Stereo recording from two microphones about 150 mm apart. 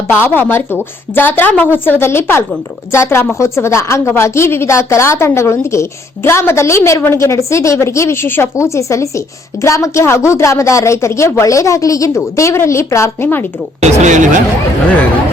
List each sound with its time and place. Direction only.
0.1 s a woman's voice: 15° left (ahead or behind)
13.8 s speech: 55° right (ahead or behind)